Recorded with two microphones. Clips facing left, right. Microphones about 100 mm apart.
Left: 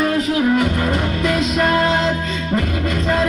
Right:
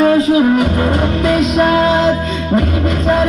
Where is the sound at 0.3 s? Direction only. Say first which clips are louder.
Right 5 dB; 20° right (ahead or behind).